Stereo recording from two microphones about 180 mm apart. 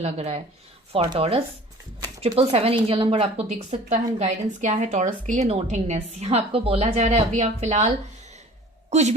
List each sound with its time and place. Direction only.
0.0 s a woman's voice: 35° right (ahead or behind)